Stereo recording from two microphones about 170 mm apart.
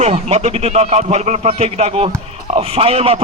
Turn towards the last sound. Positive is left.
turn(degrees=-35)  # may be behind; listen again after turning